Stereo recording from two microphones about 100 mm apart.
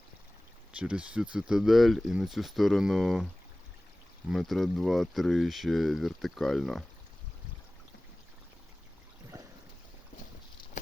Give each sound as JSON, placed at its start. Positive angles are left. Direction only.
{"t": 0.8, "sound": "speech", "side_deg": -10}
{"t": 4.3, "sound": "speech", "side_deg": 0}